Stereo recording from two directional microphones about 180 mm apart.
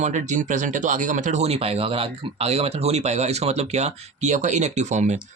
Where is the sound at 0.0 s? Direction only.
40° right (ahead or behind).